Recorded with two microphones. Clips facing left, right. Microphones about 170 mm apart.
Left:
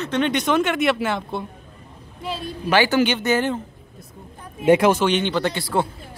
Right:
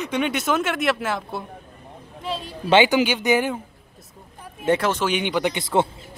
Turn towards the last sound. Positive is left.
turn(degrees=-20)  # may be behind; listen again after turning